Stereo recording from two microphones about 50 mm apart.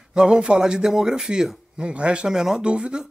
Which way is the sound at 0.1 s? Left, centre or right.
Centre.